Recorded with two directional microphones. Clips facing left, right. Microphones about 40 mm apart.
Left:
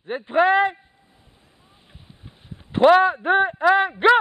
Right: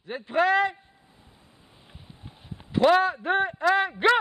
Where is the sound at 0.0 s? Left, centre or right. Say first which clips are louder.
Left 5 dB; left.